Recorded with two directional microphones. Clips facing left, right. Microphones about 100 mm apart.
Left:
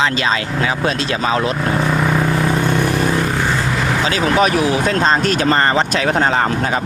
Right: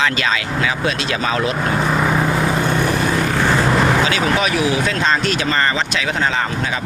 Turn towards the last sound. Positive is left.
turn(degrees=45)  # may be behind; listen again after turning